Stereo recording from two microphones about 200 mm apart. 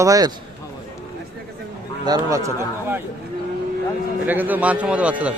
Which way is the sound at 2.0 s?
15° right (ahead or behind).